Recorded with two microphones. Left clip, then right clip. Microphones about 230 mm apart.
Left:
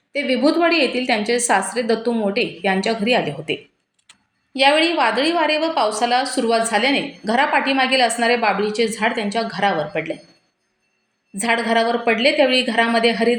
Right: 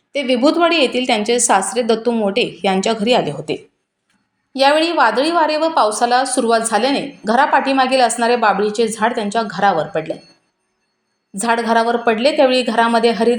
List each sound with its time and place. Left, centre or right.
0.1 s a woman's voice: right
11.3 s a woman's voice: centre